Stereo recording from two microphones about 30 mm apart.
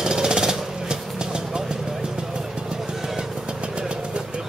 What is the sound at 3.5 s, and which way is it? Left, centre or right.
Vehicle, right.